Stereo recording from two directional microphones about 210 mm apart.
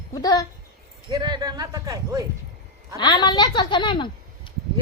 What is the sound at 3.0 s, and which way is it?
A woman's voice, 20° left (ahead or behind).